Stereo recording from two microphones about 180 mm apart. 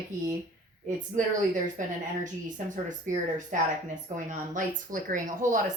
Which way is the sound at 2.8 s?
45° right (ahead or behind).